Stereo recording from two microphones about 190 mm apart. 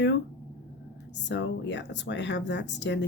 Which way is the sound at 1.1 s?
70° left (ahead or behind).